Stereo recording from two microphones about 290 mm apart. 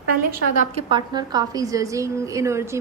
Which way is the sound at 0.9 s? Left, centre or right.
Centre.